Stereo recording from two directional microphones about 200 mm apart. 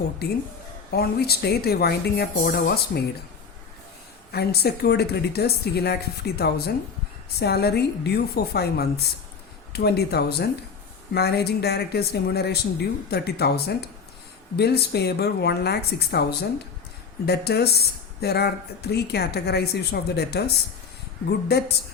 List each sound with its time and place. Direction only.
0.9 s speech: 50° left (ahead or behind)
4.3 s speech: 50° left (ahead or behind)